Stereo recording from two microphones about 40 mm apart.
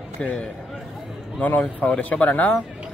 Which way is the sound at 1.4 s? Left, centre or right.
Left.